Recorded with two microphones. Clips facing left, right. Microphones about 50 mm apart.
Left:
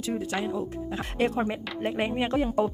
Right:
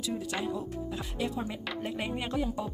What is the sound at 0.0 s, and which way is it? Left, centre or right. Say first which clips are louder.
Speech: left 4 dB; left.